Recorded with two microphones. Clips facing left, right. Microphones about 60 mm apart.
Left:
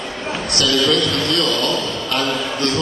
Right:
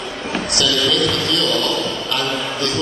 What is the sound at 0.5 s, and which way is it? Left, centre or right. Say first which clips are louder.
Speech: left 2 dB; left.